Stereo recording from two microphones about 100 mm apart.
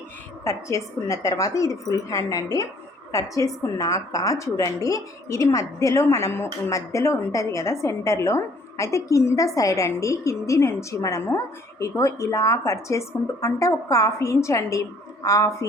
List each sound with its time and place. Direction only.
0.4 s a woman's voice: 30° left (ahead or behind)